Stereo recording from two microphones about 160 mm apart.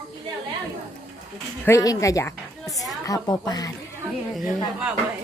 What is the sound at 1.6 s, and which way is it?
A woman's voice, 20° left (ahead or behind).